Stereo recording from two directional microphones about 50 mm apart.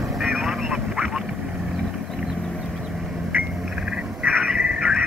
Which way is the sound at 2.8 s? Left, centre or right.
Centre.